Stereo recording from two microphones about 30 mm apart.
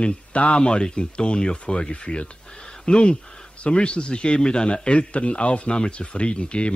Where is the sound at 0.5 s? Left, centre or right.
Left.